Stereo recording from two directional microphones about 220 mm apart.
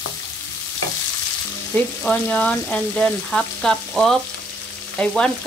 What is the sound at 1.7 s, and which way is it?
Frying, 5° left (ahead or behind).